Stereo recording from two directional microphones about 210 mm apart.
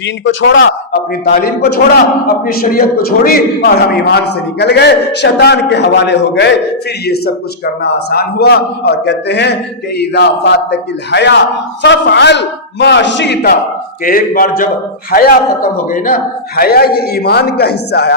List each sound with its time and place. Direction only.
0.3 s a man's voice: 60° left (ahead or behind)
1.3 s a man's voice: 45° left (ahead or behind)
8.1 s a man's voice: 50° left (ahead or behind)